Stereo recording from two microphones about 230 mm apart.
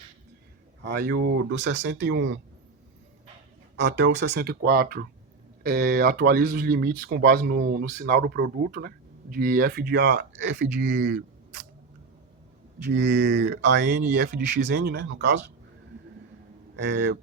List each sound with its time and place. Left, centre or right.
0.8 s speech: right
3.8 s speech: right
12.9 s speech: right
16.7 s speech: right